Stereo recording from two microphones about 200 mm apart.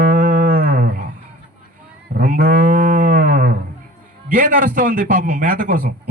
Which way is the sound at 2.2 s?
45° right (ahead or behind).